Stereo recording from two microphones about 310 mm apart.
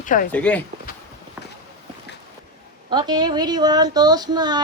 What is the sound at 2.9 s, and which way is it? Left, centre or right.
Speech, centre.